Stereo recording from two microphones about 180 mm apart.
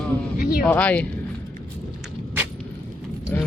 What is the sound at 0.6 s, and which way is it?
Speech, 5° left (ahead or behind).